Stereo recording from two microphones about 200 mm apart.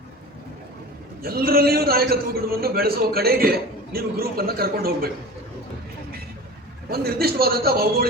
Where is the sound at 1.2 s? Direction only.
50° right (ahead or behind).